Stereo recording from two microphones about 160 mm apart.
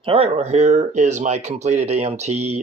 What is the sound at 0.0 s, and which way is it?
Speech, 35° right (ahead or behind).